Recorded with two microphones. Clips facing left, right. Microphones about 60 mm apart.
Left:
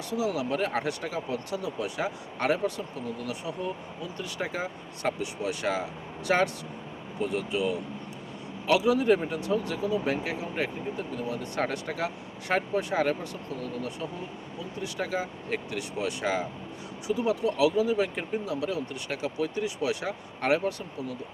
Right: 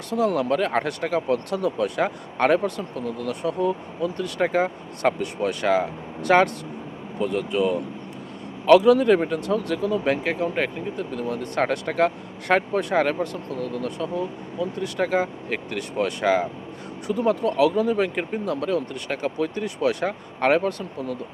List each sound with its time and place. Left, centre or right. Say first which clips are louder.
0.1 s speech: right 7 dB; right